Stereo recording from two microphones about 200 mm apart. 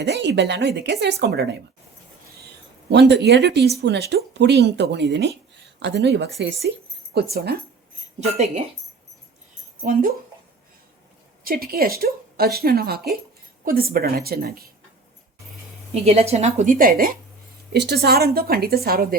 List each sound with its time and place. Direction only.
0.1 s a woman's voice: 60° right (ahead or behind)
2.9 s a woman's voice: 60° right (ahead or behind)
11.4 s speech: 50° right (ahead or behind)
15.9 s a woman's voice: 30° right (ahead or behind)
17.7 s speech: 55° right (ahead or behind)